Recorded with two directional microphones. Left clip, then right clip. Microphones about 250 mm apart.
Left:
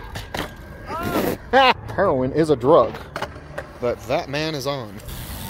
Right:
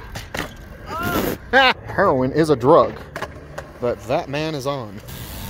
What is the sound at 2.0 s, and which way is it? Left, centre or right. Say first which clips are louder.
Speech: right 2 dB; centre.